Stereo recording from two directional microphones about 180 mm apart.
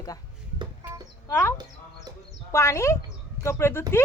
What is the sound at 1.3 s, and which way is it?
Speech, 15° left (ahead or behind).